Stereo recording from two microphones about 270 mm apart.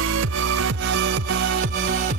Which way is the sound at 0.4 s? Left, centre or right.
Right.